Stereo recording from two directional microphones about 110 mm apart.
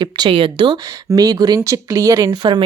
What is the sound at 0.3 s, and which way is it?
Speech, 55° right (ahead or behind).